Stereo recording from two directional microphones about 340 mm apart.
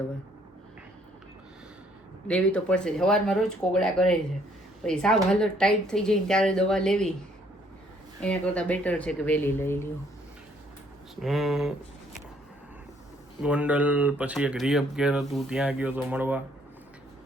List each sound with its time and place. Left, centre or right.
2.2 s speech: centre
8.2 s speech: centre
11.2 s speech: centre
13.4 s speech: centre